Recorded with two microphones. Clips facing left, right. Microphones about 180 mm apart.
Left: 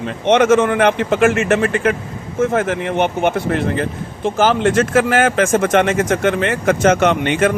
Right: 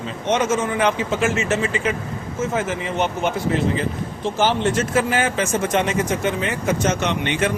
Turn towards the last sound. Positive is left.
turn(degrees=50)  # may be behind; listen again after turning